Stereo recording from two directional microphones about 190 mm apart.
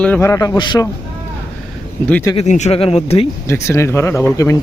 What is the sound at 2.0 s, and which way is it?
Speech, 10° left (ahead or behind).